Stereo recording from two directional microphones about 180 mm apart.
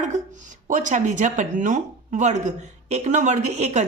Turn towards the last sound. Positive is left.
turn(degrees=-40)  # may be behind; listen again after turning